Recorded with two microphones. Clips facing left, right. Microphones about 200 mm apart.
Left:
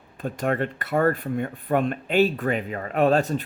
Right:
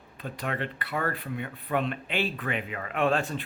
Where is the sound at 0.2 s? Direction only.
45° left (ahead or behind).